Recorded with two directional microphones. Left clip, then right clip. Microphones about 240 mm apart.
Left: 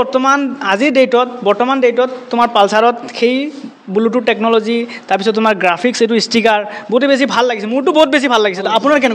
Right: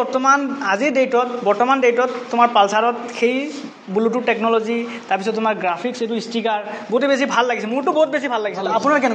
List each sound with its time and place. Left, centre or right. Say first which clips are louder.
0.0 s a man's voice: left 4 dB; left